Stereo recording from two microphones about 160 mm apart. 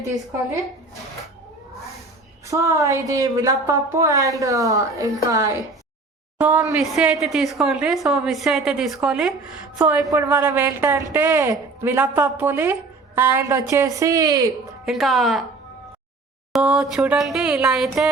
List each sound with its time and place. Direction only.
2.5 s a woman's voice: 20° right (ahead or behind)
6.4 s a woman's voice: 10° right (ahead or behind); by 14.5 s 25° right (ahead or behind)
14.8 s a woman's voice: centre (ahead or behind)
16.5 s a woman's voice: 5° right (ahead or behind)